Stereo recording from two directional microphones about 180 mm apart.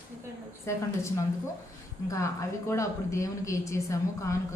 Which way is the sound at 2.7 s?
15° left (ahead or behind).